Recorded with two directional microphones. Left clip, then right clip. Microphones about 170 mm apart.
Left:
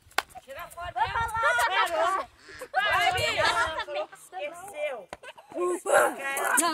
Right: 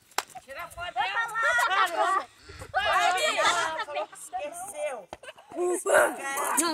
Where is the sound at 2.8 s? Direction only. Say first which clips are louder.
Right 1 dB; 15° right (ahead or behind).